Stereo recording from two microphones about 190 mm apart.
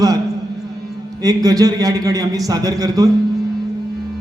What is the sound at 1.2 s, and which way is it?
A man's voice, 20° right (ahead or behind).